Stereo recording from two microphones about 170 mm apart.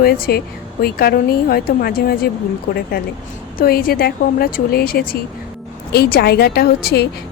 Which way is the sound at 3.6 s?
60° left (ahead or behind).